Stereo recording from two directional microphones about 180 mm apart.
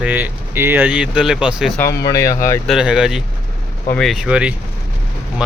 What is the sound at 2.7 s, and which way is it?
Speech, 5° right (ahead or behind).